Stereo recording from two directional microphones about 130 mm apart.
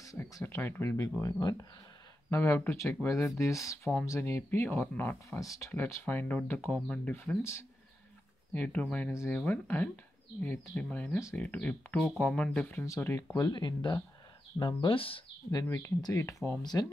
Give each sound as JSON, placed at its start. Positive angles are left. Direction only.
{"t": 0.0, "sound": "speech", "side_deg": 25}
{"t": 8.5, "sound": "speech", "side_deg": 15}
{"t": 12.8, "sound": "speech", "side_deg": 25}
{"t": 13.4, "sound": "speech", "side_deg": 35}
{"t": 15.5, "sound": "speech", "side_deg": 25}